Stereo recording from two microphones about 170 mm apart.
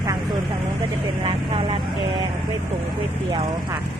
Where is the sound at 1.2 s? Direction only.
30° right (ahead or behind).